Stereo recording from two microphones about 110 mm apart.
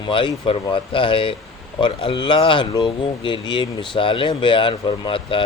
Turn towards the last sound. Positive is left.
turn(degrees=50)  # may be behind; listen again after turning